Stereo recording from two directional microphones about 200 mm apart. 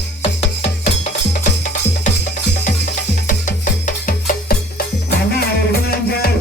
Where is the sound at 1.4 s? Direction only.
40° left (ahead or behind).